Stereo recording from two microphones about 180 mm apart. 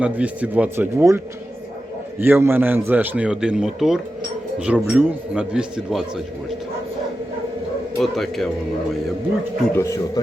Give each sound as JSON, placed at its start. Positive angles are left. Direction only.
{"t": 0.0, "sound": "a man's voice", "side_deg": -5}
{"t": 2.2, "sound": "a man's voice", "side_deg": -10}
{"t": 7.9, "sound": "speech", "side_deg": 0}
{"t": 9.7, "sound": "a man's voice", "side_deg": 15}